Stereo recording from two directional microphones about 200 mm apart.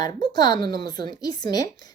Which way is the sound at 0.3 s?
20° left (ahead or behind).